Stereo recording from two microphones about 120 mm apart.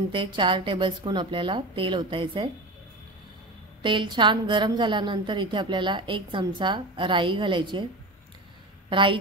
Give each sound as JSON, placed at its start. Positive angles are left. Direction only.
{"t": 0.1, "sound": "a woman's voice", "side_deg": -45}
{"t": 3.8, "sound": "a woman's voice", "side_deg": -40}
{"t": 8.8, "sound": "a woman's voice", "side_deg": -45}